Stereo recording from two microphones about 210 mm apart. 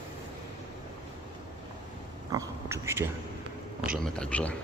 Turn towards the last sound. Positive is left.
turn(degrees=5)  # may be behind; listen again after turning